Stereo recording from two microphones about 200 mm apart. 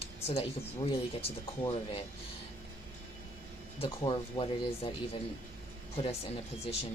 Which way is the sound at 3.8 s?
25° left (ahead or behind).